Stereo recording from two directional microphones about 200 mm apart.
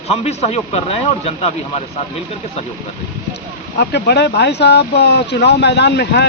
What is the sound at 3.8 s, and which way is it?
Speech, 55° left (ahead or behind).